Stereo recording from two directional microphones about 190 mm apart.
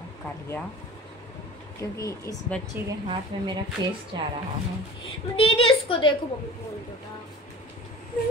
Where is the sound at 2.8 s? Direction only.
10° right (ahead or behind).